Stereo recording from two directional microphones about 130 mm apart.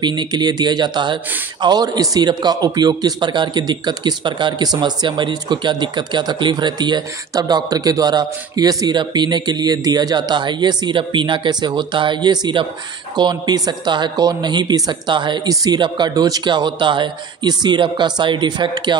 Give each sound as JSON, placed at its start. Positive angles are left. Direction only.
{"t": 0.0, "sound": "speech", "side_deg": -35}